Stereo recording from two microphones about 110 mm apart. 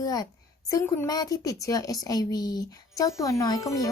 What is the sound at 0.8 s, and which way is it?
Speech, 20° left (ahead or behind).